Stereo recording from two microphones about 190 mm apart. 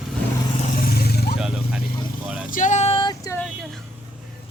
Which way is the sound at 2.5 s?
40° left (ahead or behind).